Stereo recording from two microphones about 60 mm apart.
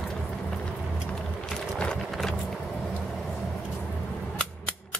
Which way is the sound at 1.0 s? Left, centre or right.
Centre.